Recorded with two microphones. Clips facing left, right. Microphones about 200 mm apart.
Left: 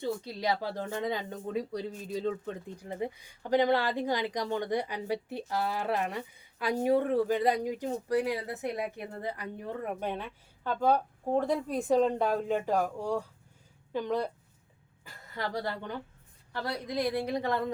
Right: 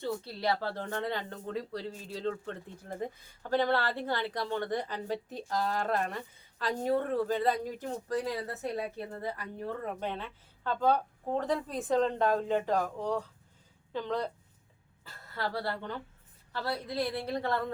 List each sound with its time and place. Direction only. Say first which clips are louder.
0.0 s speech: left 1 dB; 15° left (ahead or behind)